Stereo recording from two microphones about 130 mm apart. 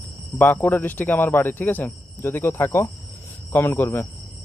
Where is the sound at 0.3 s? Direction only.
15° left (ahead or behind).